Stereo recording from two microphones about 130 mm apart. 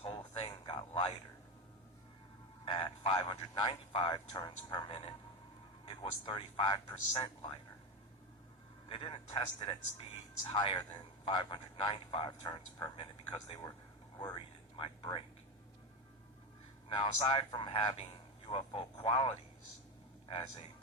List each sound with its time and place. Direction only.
0.0 s a sound: 40° left (ahead or behind)
2.6 s a sound: 40° left (ahead or behind)
5.8 s a man's voice: 40° left (ahead or behind)
8.9 s a man's voice: 40° left (ahead or behind)
11.3 s a man's voice: 35° left (ahead or behind)
14.2 s speech: 40° left (ahead or behind)
16.9 s a man's voice: 40° left (ahead or behind)